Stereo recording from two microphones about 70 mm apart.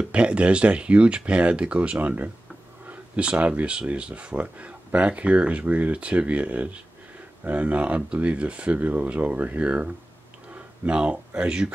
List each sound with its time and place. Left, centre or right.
0.1 s speech: centre